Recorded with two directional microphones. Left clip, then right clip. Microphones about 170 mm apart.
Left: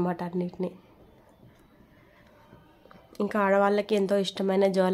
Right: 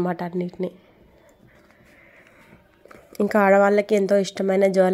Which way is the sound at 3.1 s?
30° right (ahead or behind).